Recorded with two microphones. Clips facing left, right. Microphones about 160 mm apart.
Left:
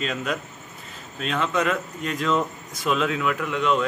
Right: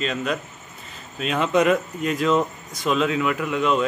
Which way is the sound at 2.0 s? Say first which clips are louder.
Right 3 dB; 5° right (ahead or behind).